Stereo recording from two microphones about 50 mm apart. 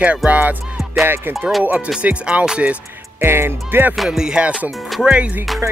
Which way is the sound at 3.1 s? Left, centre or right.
Right.